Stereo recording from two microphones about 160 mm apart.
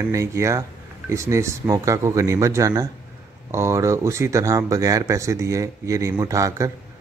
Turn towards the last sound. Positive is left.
turn(degrees=-20)  # may be behind; listen again after turning